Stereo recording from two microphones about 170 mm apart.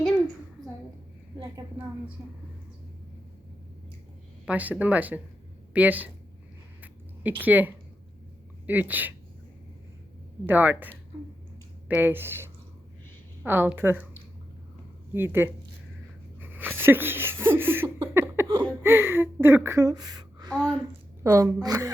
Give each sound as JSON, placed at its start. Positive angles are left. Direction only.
{"t": 4.4, "sound": "speech", "side_deg": -10}
{"t": 6.8, "sound": "a sound", "side_deg": -10}
{"t": 7.4, "sound": "speech", "side_deg": -10}
{"t": 10.4, "sound": "speech", "side_deg": -10}
{"t": 15.1, "sound": "speech", "side_deg": -15}
{"t": 16.4, "sound": "a sound", "side_deg": -10}
{"t": 18.8, "sound": "a woman's voice", "side_deg": -15}